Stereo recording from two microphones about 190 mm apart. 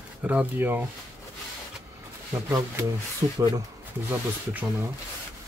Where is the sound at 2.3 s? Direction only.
15° right (ahead or behind).